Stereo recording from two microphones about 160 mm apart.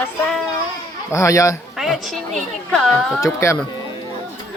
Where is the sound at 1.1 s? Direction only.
20° left (ahead or behind).